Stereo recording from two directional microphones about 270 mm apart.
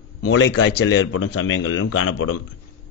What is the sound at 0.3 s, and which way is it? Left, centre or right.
Speech, left.